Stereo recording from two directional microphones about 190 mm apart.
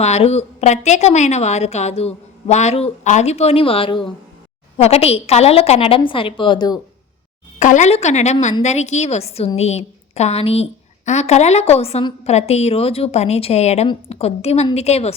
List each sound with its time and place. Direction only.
0.0 s a woman's voice: 35° left (ahead or behind)
7.6 s a woman's voice: 40° left (ahead or behind)